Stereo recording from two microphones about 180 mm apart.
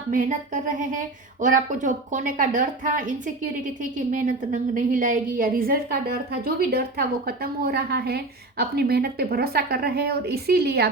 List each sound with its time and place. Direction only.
0.1 s a woman's voice: 45° right (ahead or behind); by 10.8 s 65° right (ahead or behind)